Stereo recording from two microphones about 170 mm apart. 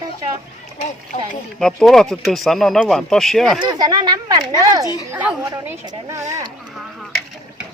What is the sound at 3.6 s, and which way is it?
Speech, 25° right (ahead or behind).